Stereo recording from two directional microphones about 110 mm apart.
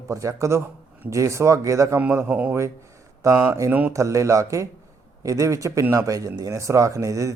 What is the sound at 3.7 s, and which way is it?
Speech, 15° right (ahead or behind).